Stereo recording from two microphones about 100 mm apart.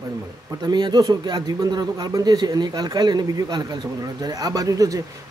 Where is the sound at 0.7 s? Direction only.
45° right (ahead or behind).